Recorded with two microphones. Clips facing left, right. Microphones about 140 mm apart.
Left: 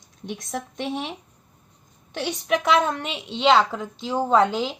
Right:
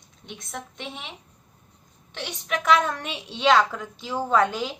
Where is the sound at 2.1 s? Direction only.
40° left (ahead or behind).